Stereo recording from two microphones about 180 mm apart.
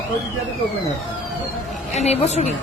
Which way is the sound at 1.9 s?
35° left (ahead or behind).